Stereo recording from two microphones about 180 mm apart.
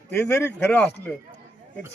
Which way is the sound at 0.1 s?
10° left (ahead or behind).